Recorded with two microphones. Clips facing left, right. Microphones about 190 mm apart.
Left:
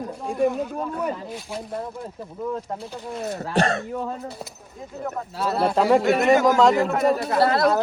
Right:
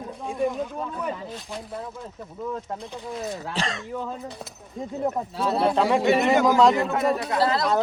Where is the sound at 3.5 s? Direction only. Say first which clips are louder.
Left 8 dB; 60° left (ahead or behind).